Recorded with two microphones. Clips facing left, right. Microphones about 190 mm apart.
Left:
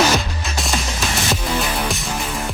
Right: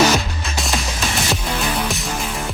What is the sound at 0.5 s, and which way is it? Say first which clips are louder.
Music: even; centre (ahead or behind).